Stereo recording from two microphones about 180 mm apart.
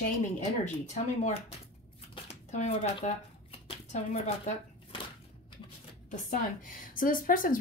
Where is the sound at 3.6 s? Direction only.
35° left (ahead or behind).